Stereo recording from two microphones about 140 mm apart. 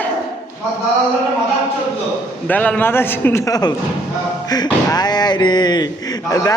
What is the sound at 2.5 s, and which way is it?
A man's voice, 10° left (ahead or behind).